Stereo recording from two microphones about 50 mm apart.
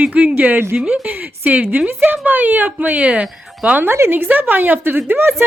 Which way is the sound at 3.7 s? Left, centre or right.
Right.